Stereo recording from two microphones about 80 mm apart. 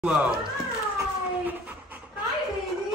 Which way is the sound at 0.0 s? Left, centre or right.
Centre.